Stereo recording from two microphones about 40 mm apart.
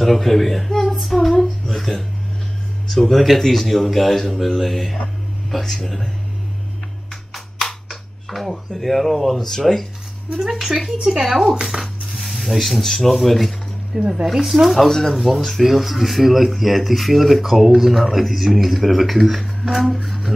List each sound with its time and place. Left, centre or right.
0.0 s speech: centre
0.9 s female singing: centre
1.3 s a sound: centre
2.9 s speech: centre
7.3 s speech: centre
10.4 s speech: centre
11.2 s speech: centre
11.7 s coin: centre
12.8 s speech: centre
13.9 s speech: right
14.2 s speech: centre
14.9 s speech: centre
15.1 s speech: centre